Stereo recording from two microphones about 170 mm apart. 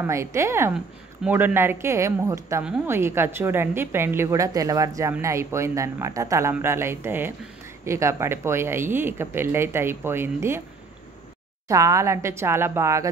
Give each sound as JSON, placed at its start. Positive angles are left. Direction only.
{"t": 0.0, "sound": "speech", "side_deg": -15}
{"t": 11.6, "sound": "speech", "side_deg": -20}